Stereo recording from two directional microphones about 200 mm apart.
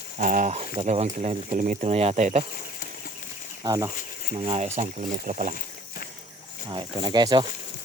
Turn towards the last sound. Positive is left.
turn(degrees=-20)  # may be behind; listen again after turning